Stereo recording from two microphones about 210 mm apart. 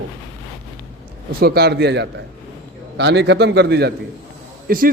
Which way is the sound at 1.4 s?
50° right (ahead or behind).